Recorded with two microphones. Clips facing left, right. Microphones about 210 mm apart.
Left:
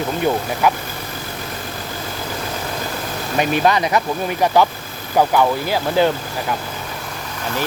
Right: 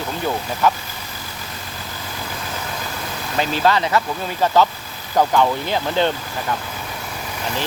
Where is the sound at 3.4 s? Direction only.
15° left (ahead or behind).